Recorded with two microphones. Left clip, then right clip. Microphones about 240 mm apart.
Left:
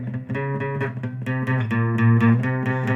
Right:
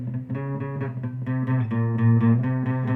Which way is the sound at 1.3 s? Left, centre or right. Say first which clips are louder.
Left 4 dB; left.